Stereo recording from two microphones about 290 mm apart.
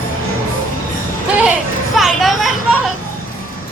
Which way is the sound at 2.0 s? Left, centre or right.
Centre.